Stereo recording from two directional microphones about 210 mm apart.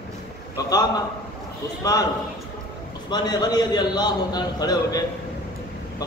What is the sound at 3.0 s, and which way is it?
A man's voice, 20° left (ahead or behind).